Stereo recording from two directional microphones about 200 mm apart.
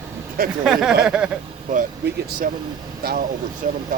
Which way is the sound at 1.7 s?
40° right (ahead or behind).